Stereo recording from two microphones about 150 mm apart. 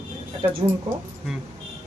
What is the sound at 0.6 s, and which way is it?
Speech, 30° right (ahead or behind).